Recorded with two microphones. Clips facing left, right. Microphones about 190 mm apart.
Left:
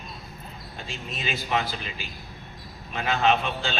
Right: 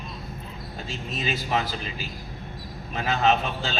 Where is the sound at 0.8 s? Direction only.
40° right (ahead or behind).